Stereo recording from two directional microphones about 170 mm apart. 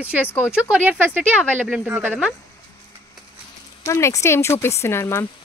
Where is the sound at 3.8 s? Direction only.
15° left (ahead or behind).